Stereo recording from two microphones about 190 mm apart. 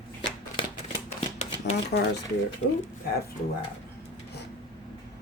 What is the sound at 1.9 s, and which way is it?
Speech, 55° left (ahead or behind).